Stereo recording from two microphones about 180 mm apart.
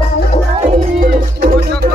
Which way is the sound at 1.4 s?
60° right (ahead or behind).